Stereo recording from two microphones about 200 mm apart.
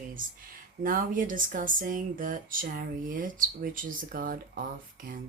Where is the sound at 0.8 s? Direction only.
45° right (ahead or behind).